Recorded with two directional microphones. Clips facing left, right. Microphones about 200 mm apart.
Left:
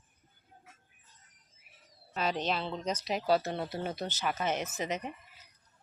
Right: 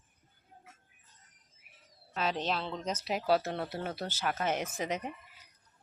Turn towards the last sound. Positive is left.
turn(degrees=-10)  # may be behind; listen again after turning